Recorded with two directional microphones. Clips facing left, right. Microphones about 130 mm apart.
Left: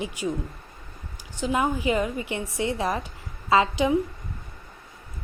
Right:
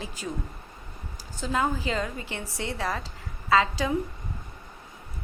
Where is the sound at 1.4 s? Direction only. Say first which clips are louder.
Left 3 dB; 15° left (ahead or behind).